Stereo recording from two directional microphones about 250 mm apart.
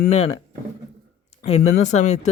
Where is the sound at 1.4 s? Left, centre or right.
Left.